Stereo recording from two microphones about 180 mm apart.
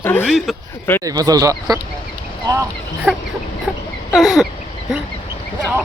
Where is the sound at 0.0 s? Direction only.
10° left (ahead or behind).